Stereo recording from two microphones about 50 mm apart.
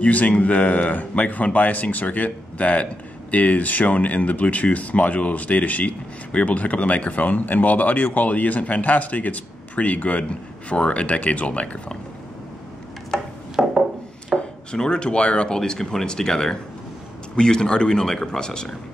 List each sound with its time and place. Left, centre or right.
0.0 s speech: left
13.6 s wood: centre
14.3 s speech: centre